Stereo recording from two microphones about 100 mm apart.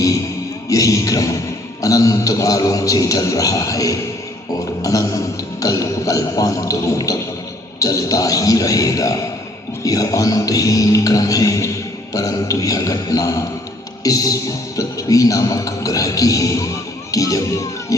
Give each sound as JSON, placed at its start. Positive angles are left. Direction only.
{"t": 0.7, "sound": "music", "side_deg": 35}
{"t": 17.1, "sound": "speech", "side_deg": 35}